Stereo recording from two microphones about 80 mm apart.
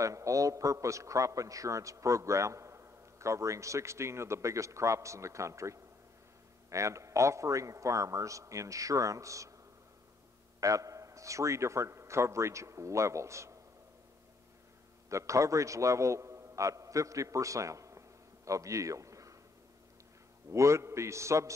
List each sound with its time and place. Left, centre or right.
0.0 s a man's voice: right
10.6 s a man's voice: right
15.0 s a man's voice: right
20.5 s a man's voice: right